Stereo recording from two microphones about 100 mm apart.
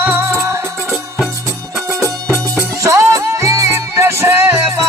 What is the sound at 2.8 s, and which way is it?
Music, 30° right (ahead or behind).